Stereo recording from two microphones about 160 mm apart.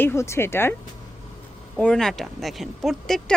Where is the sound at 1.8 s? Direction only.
5° left (ahead or behind).